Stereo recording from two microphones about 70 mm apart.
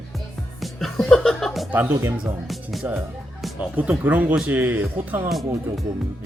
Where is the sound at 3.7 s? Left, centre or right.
Right.